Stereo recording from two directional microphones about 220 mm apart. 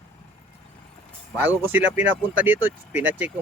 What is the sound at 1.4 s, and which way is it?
Speech, 10° right (ahead or behind).